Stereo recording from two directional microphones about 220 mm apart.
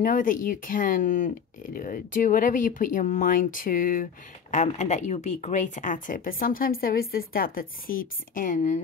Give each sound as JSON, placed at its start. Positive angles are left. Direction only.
{"t": 0.0, "sound": "speech", "side_deg": 40}